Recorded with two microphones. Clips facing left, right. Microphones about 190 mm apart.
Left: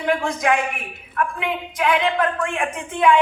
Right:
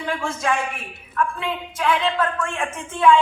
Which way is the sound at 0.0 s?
15° left (ahead or behind).